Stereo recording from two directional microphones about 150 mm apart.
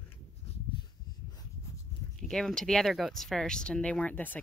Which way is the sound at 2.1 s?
5° left (ahead or behind).